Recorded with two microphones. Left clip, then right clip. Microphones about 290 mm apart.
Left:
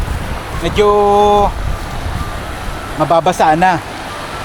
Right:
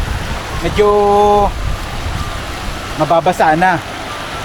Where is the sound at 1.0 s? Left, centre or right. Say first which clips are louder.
Even; left.